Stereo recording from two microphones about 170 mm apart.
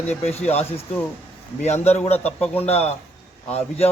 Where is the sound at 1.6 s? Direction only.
40° left (ahead or behind).